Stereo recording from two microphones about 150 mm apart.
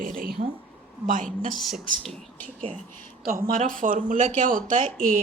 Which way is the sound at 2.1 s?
10° left (ahead or behind).